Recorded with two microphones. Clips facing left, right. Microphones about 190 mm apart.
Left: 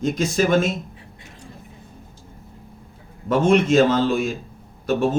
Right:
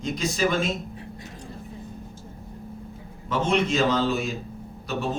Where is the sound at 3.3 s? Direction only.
50° left (ahead or behind).